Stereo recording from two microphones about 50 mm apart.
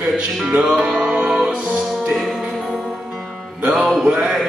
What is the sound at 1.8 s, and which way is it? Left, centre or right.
Music, centre.